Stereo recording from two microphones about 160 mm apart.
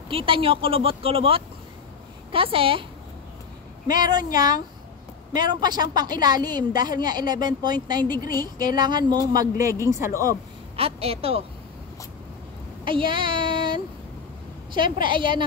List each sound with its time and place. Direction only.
0.1 s speech: 35° right (ahead or behind)
3.9 s a woman's voice: 25° right (ahead or behind)
10.8 s speech: 40° right (ahead or behind)
12.8 s child singing: 30° right (ahead or behind)
14.7 s a woman's voice: 30° right (ahead or behind)